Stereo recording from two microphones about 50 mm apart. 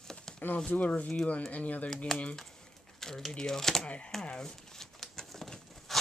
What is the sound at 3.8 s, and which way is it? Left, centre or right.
Speech, left.